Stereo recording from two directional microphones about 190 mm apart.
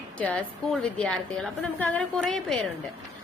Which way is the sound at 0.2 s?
5° left (ahead or behind).